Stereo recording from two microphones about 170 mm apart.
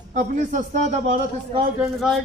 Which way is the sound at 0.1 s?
45° right (ahead or behind).